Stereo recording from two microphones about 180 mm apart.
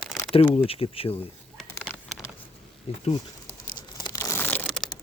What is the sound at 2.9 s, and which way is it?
Speech, 35° left (ahead or behind).